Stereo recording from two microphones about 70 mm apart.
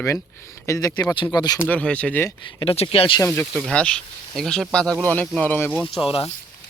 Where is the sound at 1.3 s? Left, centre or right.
Left.